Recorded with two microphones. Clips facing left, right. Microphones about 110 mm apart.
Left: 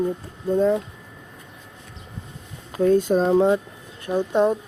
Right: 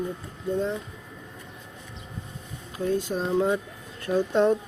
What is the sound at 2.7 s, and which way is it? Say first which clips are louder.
Speech: left 9 dB; 55° left (ahead or behind).